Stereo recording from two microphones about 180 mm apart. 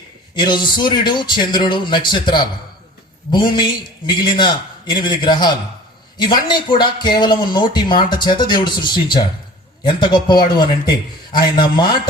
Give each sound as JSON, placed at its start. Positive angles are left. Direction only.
{"t": 0.3, "sound": "speech", "side_deg": 25}